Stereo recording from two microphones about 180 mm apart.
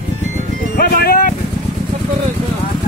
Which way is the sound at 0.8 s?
55° left (ahead or behind).